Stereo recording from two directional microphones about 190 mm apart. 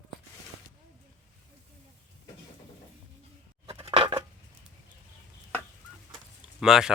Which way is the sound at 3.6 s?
30° right (ahead or behind).